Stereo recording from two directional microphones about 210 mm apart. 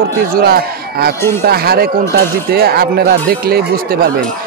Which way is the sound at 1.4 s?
45° right (ahead or behind).